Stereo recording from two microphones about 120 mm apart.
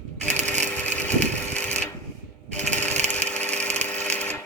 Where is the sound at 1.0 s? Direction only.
70° right (ahead or behind).